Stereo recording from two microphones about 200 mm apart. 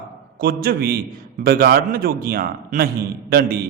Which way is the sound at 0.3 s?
50° right (ahead or behind).